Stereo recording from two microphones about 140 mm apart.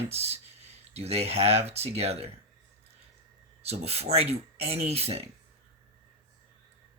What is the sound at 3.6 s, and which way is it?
Speech, 50° right (ahead or behind).